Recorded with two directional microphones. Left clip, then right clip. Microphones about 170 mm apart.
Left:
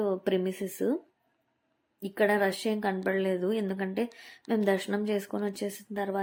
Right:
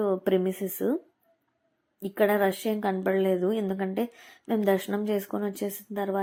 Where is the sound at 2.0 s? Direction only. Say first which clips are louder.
Right 2 dB; 5° right (ahead or behind).